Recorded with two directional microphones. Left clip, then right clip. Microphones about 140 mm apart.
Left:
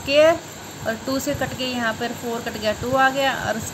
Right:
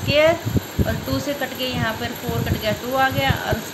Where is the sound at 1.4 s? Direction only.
30° left (ahead or behind).